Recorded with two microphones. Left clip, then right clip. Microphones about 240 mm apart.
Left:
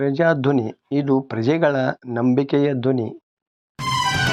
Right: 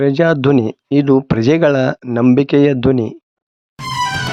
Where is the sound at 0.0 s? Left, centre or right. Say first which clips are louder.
Right 5 dB; right.